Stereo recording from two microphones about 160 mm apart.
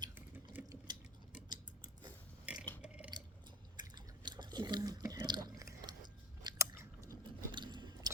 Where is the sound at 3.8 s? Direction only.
25° right (ahead or behind).